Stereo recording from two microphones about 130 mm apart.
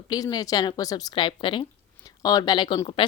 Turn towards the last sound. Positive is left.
turn(degrees=40)  # may be behind; listen again after turning